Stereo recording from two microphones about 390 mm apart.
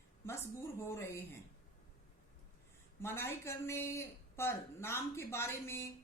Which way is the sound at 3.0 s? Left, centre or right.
Centre.